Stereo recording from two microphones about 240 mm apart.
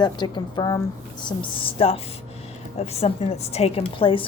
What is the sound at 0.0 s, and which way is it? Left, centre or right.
A woman's voice, centre.